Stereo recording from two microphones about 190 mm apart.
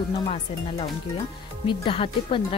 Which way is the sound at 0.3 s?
30° left (ahead or behind).